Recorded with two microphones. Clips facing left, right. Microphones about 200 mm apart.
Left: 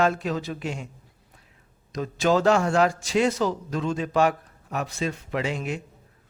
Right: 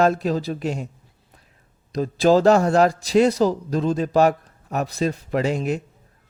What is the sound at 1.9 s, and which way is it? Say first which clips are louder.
Speech: right 6 dB; 35° right (ahead or behind).